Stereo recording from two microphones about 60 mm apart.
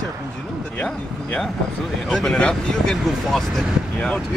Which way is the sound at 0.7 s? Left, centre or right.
Left.